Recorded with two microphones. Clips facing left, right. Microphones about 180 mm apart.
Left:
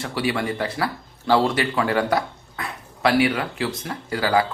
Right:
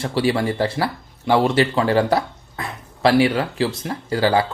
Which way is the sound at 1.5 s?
30° right (ahead or behind).